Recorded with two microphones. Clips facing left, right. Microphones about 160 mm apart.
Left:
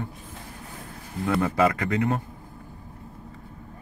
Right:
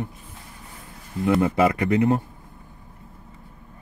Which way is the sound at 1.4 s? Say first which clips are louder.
Right 3 dB; 25° right (ahead or behind).